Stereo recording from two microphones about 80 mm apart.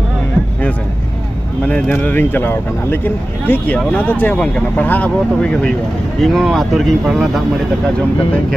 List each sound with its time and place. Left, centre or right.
1.7 s speech: left
4.4 s speech: centre
6.2 s speech: centre